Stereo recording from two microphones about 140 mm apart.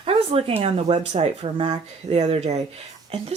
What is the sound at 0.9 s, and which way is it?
Speech, 50° right (ahead or behind).